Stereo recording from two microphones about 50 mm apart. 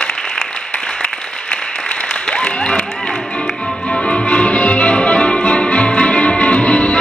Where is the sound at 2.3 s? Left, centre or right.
Centre.